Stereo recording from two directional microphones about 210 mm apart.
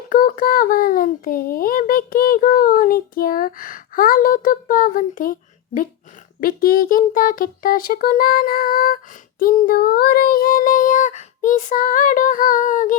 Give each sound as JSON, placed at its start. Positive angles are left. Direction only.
{"t": 0.1, "sound": "speech", "side_deg": 40}
{"t": 6.4, "sound": "music", "side_deg": 45}
{"t": 9.4, "sound": "speech", "side_deg": 40}